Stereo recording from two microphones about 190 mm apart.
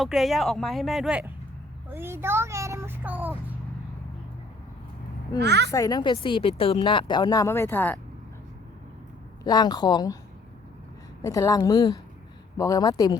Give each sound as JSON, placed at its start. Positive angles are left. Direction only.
{"t": 0.0, "sound": "a child's voice", "side_deg": 0}
{"t": 5.4, "sound": "a woman's voice", "side_deg": -60}
{"t": 5.7, "sound": "a woman's voice", "side_deg": 20}
{"t": 9.4, "sound": "a woman's voice", "side_deg": 20}
{"t": 11.2, "sound": "a woman's voice", "side_deg": 15}